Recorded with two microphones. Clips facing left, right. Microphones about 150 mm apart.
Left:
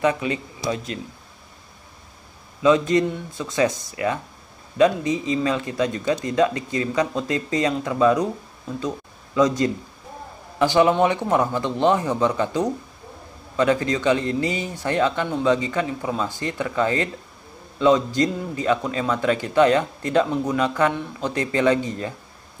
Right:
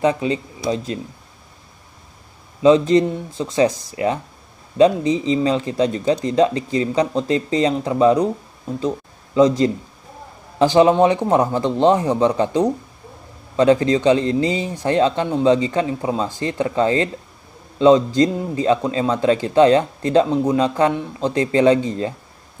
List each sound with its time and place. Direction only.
0.0 s speech: 30° right (ahead or behind)
2.6 s a man's voice: 25° right (ahead or behind)